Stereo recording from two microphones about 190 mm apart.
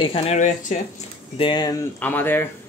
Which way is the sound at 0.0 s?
35° left (ahead or behind).